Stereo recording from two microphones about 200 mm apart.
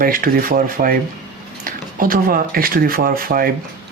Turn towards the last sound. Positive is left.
turn(degrees=-45)  # may be behind; listen again after turning